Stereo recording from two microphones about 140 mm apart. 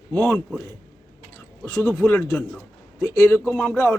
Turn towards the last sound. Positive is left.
turn(degrees=5)  # may be behind; listen again after turning